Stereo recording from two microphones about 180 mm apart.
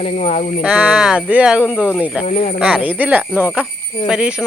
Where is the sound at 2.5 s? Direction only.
5° right (ahead or behind).